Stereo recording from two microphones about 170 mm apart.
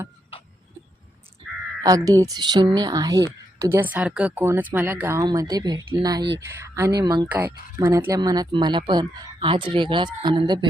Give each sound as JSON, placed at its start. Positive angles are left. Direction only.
{"t": 1.8, "sound": "speech", "side_deg": -20}
{"t": 7.3, "sound": "speech", "side_deg": -10}